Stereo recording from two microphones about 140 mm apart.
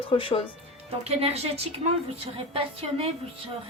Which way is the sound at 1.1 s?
45° right (ahead or behind).